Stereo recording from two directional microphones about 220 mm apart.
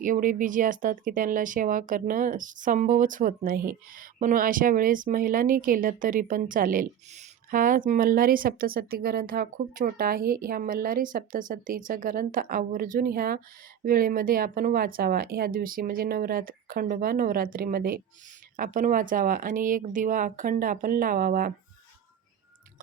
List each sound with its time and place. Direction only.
0.0 s speech: 35° right (ahead or behind)